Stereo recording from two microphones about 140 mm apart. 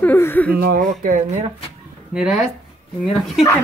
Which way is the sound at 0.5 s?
90° right.